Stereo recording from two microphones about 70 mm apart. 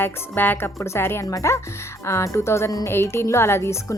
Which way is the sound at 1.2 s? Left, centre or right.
Left.